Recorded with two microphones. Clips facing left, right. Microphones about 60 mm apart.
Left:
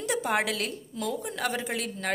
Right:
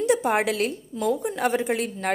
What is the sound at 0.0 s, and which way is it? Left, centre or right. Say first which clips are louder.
A woman's voice: right 6 dB; centre.